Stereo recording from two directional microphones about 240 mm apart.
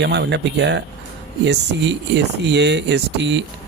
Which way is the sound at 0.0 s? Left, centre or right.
Right.